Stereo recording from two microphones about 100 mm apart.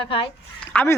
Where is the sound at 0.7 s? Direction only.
20° left (ahead or behind).